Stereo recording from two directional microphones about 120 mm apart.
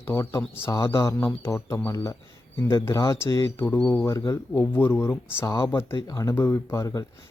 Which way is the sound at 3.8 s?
10° left (ahead or behind).